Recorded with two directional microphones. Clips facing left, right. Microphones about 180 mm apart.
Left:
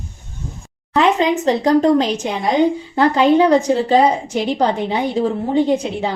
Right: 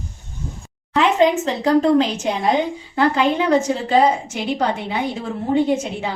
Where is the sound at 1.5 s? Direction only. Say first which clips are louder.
Left 3 dB; 40° left (ahead or behind).